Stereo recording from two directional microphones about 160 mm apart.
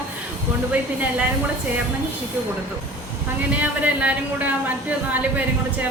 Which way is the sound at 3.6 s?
10° right (ahead or behind).